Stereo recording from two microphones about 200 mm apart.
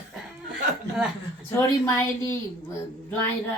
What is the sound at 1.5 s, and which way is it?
Speech, 15° left (ahead or behind).